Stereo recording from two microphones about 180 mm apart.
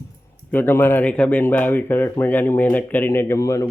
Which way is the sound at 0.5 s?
10° left (ahead or behind).